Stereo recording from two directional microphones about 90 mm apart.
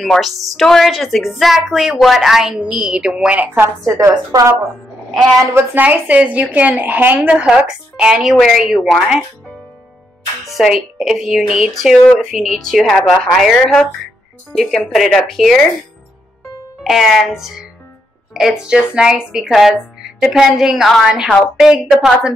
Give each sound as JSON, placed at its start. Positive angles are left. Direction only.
{"t": 0.0, "sound": "a woman's voice", "side_deg": 0}
{"t": 4.3, "sound": "speech", "side_deg": -40}
{"t": 5.8, "sound": "a woman's voice", "side_deg": -20}
{"t": 10.4, "sound": "a woman's voice", "side_deg": 0}
{"t": 16.8, "sound": "a woman's voice", "side_deg": 0}
{"t": 21.3, "sound": "a woman's voice", "side_deg": 5}
{"t": 21.6, "sound": "a woman's voice", "side_deg": -5}